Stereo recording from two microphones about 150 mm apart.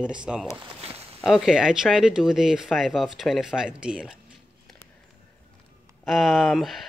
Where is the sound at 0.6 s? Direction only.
40° right (ahead or behind).